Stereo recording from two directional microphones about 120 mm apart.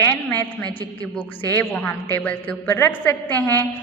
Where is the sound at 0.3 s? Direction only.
10° left (ahead or behind).